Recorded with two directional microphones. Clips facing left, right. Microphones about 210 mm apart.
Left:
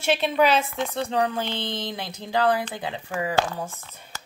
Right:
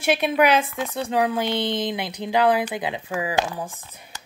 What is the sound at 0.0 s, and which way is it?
A woman's voice, 10° right (ahead or behind).